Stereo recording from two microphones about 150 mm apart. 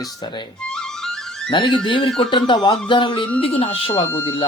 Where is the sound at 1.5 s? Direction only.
30° left (ahead or behind).